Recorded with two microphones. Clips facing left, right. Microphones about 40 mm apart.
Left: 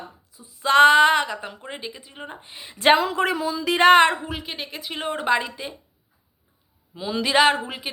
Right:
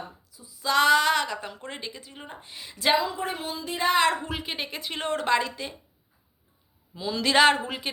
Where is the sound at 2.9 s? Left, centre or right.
Left.